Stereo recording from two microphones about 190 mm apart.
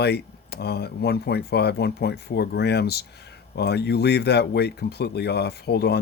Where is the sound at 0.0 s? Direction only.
60° left (ahead or behind).